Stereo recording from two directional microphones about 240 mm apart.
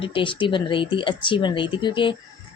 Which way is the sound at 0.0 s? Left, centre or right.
Left.